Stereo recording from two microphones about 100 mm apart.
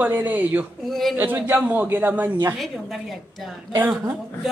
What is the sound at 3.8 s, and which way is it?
Speech, 20° right (ahead or behind).